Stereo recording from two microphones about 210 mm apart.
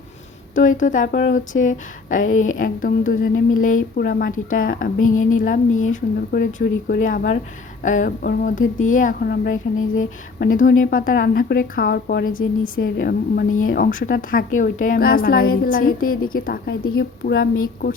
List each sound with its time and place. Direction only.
0.5 s a woman's voice: 40° left (ahead or behind)